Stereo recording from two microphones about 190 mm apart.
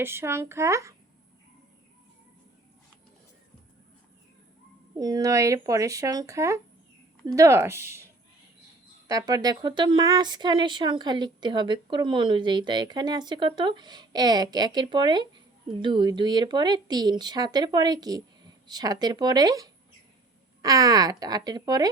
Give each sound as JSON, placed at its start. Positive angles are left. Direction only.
{"t": 0.0, "sound": "speech", "side_deg": -10}
{"t": 4.9, "sound": "speech", "side_deg": -20}